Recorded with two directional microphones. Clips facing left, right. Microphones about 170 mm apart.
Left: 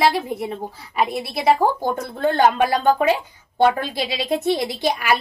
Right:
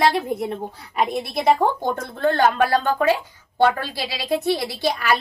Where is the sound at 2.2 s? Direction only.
15° left (ahead or behind).